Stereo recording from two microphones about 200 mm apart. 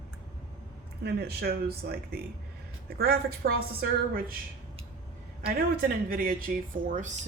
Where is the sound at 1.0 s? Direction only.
55° right (ahead or behind).